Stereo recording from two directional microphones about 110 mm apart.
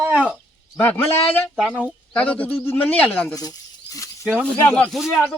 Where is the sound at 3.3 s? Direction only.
35° left (ahead or behind).